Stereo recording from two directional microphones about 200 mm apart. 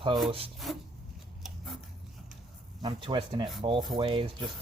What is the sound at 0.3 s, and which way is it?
Speech, 30° right (ahead or behind).